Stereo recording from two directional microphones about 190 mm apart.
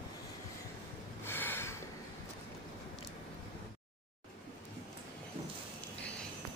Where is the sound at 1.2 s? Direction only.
10° left (ahead or behind).